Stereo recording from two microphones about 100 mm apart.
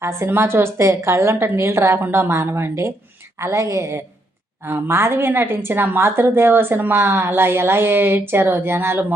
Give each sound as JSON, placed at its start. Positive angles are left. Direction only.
{"t": 0.0, "sound": "a woman's voice", "side_deg": -25}